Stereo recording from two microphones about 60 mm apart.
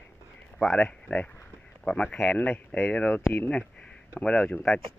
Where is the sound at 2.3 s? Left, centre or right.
Left.